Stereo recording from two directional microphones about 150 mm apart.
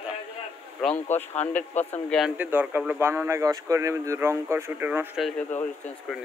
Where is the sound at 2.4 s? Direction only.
10° right (ahead or behind).